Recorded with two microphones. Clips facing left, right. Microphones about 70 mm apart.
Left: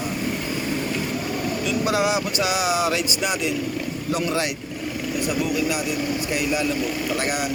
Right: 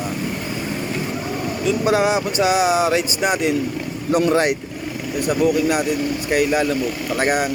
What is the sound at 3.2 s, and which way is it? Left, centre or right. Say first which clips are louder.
Speech: right 5 dB; right.